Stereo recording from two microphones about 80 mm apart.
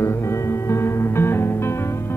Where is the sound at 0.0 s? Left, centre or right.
Left.